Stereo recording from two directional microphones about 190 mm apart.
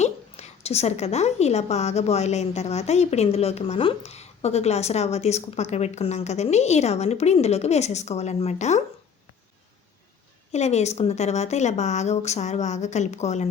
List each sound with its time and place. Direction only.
0.0 s a woman's voice: 35° left (ahead or behind)
10.5 s a woman's voice: 35° left (ahead or behind)